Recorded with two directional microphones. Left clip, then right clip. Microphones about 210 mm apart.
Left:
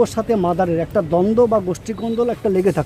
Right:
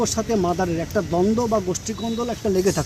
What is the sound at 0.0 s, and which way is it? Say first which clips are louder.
Speech: left 5 dB; 45° left (ahead or behind).